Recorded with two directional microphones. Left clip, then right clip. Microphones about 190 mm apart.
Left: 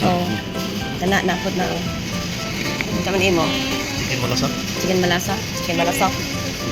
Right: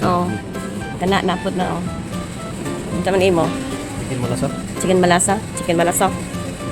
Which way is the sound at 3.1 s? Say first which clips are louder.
Right 4 dB; 75° right (ahead or behind).